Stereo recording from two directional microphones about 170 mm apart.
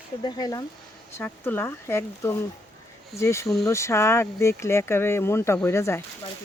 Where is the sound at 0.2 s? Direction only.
25° left (ahead or behind).